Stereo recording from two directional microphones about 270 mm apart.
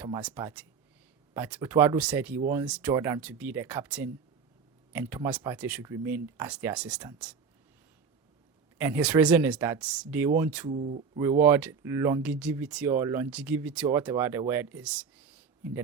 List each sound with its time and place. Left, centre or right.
0.0 s speech: centre
8.8 s speech: centre
10.7 s speech: right
11.2 s speech: centre